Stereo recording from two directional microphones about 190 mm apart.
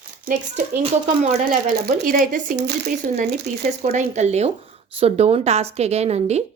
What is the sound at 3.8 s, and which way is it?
A woman's voice, 40° right (ahead or behind).